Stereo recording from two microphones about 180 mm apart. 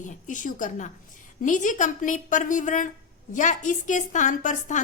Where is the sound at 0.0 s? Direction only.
45° left (ahead or behind).